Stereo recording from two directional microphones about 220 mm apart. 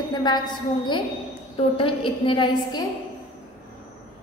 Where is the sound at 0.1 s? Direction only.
20° left (ahead or behind).